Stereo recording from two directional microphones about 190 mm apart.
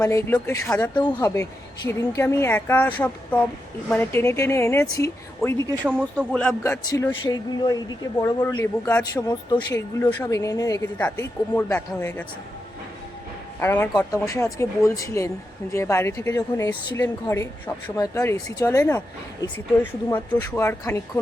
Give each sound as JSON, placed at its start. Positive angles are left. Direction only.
{"t": 0.0, "sound": "a woman's voice", "side_deg": 15}
{"t": 9.5, "sound": "a woman's voice", "side_deg": 20}
{"t": 13.6, "sound": "a woman's voice", "side_deg": 10}